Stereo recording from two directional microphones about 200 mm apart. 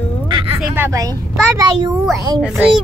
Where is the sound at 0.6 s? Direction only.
10° right (ahead or behind).